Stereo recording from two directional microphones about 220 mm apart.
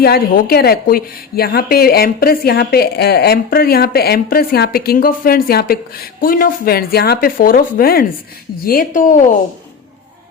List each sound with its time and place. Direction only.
0.0 s a woman's voice: 45° left (ahead or behind)